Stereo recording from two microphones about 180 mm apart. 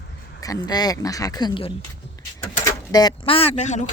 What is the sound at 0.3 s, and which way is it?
Speech, 20° left (ahead or behind).